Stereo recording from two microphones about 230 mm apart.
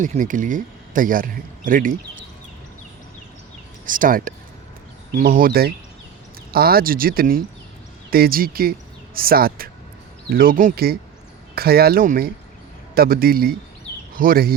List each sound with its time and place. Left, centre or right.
0.0 s speech: right
3.8 s speech: right